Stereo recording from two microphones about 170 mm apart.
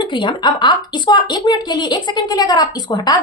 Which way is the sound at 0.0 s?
25° left (ahead or behind).